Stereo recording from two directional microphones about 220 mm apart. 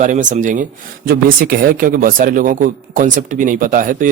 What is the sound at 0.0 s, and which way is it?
Speech, 35° right (ahead or behind).